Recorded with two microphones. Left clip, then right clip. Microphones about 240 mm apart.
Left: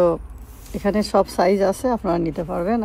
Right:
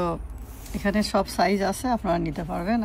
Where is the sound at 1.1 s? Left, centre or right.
Left.